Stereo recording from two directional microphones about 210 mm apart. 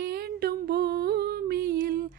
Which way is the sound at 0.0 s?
45° right (ahead or behind).